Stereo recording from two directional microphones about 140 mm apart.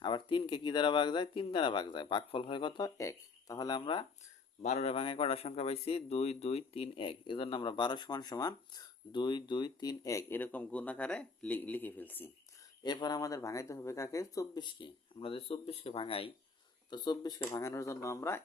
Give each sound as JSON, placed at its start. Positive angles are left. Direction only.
{"t": 0.0, "sound": "speech", "side_deg": 35}
{"t": 4.6, "sound": "speech", "side_deg": 50}
{"t": 12.8, "sound": "speech", "side_deg": 30}
{"t": 16.9, "sound": "speech", "side_deg": 30}